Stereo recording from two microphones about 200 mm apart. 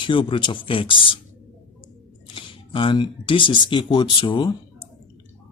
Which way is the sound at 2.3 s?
25° left (ahead or behind).